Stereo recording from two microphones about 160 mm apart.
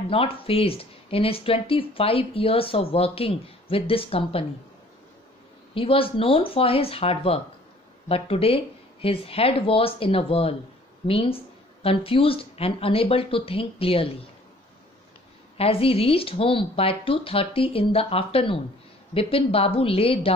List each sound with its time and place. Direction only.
0.1 s speech: 35° left (ahead or behind)
5.8 s speech: 35° left (ahead or behind)
15.5 s speech: 35° left (ahead or behind)